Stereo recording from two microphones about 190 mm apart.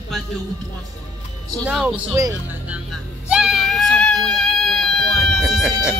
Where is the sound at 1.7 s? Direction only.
5° right (ahead or behind).